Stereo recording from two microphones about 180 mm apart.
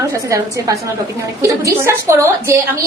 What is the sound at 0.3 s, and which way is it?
A woman's voice, 15° right (ahead or behind).